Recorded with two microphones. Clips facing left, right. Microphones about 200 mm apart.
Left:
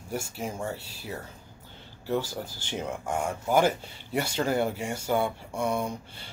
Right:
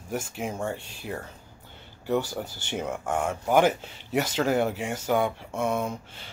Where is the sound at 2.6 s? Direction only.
10° right (ahead or behind).